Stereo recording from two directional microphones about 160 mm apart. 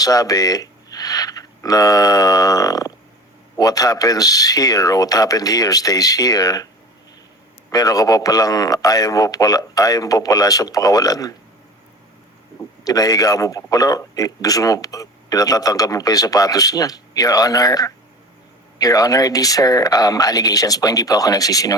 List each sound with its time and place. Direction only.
0.0 s a man's voice: 20° left (ahead or behind)
7.7 s a man's voice: 20° left (ahead or behind)
12.8 s a man's voice: 25° left (ahead or behind)